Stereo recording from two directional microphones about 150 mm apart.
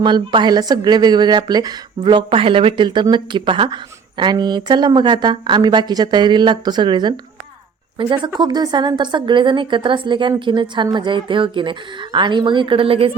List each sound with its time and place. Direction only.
0.0 s a woman's voice: 30° right (ahead or behind)